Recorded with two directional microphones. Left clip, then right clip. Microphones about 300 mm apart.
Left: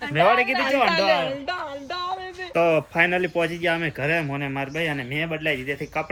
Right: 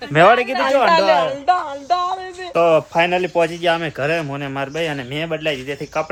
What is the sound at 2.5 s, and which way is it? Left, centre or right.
A man's voice, centre.